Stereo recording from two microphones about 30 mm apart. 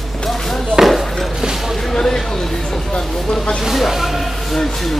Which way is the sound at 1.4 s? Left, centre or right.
Centre.